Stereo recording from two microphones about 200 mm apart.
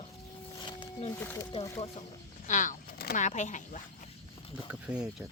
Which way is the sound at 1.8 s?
30° left (ahead or behind).